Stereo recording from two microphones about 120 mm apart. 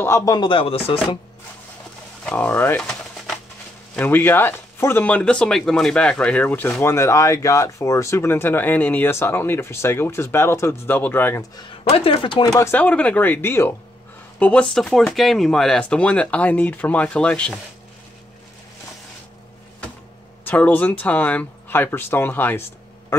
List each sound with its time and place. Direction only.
0.0 s a sound: 25° left (ahead or behind); by 0.9 s 50° left (ahead or behind)
2.2 s speech: 10° left (ahead or behind)
2.8 s a sound: 5° left (ahead or behind)
3.9 s speech: 15° left (ahead or behind)
11.9 s speech: 50° left (ahead or behind)
12.4 s speech: 25° left (ahead or behind)
12.8 s speech: 10° left (ahead or behind)
20.4 s speech: 15° left (ahead or behind)